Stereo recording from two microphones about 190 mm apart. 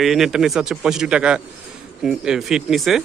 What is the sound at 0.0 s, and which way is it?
Speech, centre (ahead or behind).